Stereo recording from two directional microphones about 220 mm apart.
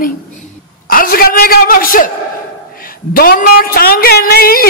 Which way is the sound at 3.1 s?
40° left (ahead or behind).